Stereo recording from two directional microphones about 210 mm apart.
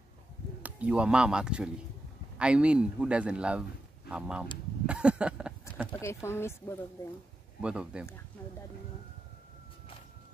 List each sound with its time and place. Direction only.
0.6 s a man's voice: 5° right (ahead or behind)
4.8 s a sound: 5° right (ahead or behind)
5.9 s speech: 15° left (ahead or behind)
7.6 s a man's voice: 5° right (ahead or behind)